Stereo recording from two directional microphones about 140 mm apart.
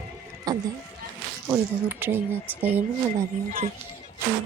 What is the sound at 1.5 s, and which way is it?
Speech, 15° right (ahead or behind).